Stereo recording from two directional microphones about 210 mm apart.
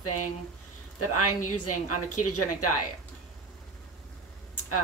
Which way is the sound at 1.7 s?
90° left.